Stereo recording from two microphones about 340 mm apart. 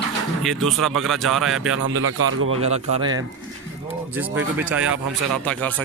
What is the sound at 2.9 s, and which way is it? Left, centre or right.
A man's voice, centre.